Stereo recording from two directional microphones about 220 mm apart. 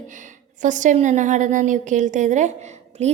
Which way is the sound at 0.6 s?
35° right (ahead or behind).